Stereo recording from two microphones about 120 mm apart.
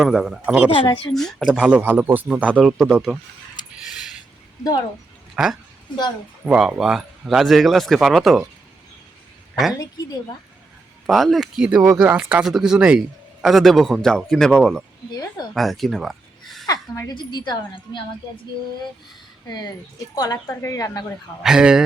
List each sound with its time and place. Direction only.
0.0 s speech: 5° right (ahead or behind)
1.1 s speech: 5° left (ahead or behind)
1.4 s speech: 5° right (ahead or behind)
5.4 s speech: 5° right (ahead or behind)
11.0 s speech: centre (ahead or behind)
16.6 s a woman's voice: 30° left (ahead or behind)
19.5 s a woman's voice: 35° left (ahead or behind)
21.4 s speech: 5° right (ahead or behind)